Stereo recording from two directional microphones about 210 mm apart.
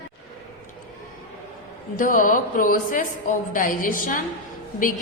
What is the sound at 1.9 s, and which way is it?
A woman's voice, 40° left (ahead or behind).